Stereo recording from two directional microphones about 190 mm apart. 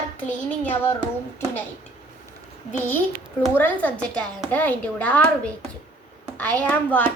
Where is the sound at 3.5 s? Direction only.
10° left (ahead or behind).